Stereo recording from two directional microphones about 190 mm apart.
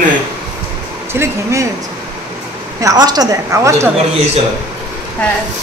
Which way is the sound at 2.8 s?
20° right (ahead or behind).